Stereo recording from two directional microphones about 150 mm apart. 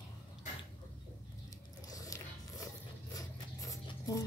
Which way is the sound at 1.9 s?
25° left (ahead or behind).